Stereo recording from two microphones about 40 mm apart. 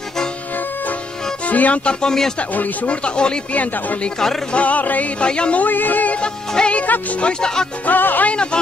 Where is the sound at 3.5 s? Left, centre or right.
Left.